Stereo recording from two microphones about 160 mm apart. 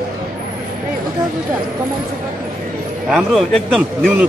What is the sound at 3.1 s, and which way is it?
A man's voice, centre (ahead or behind).